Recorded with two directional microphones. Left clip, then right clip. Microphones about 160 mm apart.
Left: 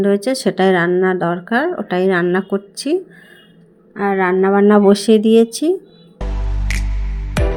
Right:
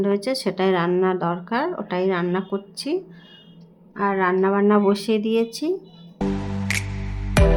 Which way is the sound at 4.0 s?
15° left (ahead or behind).